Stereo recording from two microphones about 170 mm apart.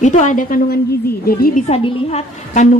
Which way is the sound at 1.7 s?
35° left (ahead or behind).